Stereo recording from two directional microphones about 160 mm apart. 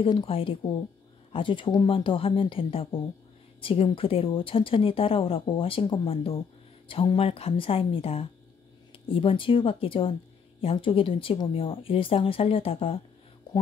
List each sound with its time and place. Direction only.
0.0 s speech: 35° left (ahead or behind)